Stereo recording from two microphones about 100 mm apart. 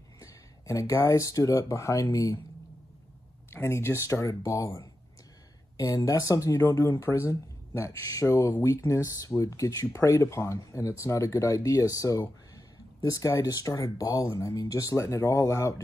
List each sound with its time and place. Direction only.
0.2 s speech: 35° left (ahead or behind)
3.4 s speech: 25° left (ahead or behind)